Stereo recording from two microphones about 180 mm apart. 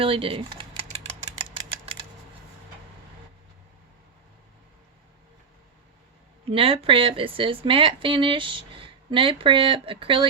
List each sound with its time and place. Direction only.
0.0 s typing: 30° right (ahead or behind)
6.5 s speech: 30° right (ahead or behind)